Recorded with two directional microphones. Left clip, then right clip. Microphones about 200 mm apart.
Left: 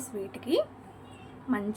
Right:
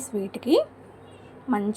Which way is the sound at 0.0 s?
30° right (ahead or behind).